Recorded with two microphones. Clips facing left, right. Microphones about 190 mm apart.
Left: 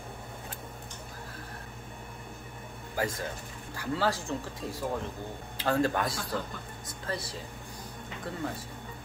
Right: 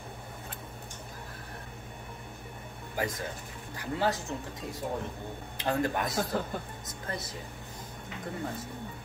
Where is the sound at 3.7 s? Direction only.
20° right (ahead or behind).